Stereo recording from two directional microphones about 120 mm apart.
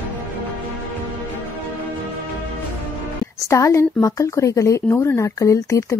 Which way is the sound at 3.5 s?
25° left (ahead or behind).